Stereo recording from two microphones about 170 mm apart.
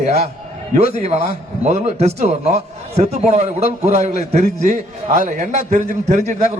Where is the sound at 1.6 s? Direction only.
40° right (ahead or behind).